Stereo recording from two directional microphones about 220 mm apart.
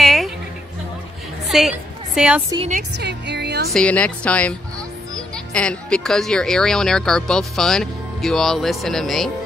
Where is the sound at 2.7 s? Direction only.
50° right (ahead or behind).